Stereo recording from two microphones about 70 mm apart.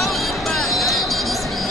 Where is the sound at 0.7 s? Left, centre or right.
Centre.